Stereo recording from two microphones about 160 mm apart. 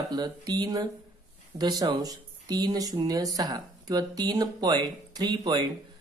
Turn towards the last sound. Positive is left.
turn(degrees=-25)  # may be behind; listen again after turning